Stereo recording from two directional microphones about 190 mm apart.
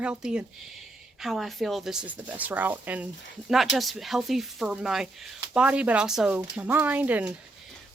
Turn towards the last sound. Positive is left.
turn(degrees=-10)  # may be behind; listen again after turning